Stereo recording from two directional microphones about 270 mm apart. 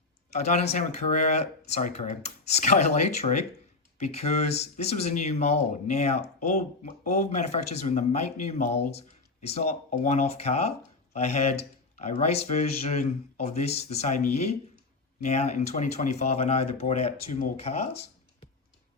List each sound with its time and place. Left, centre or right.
0.3 s speech: left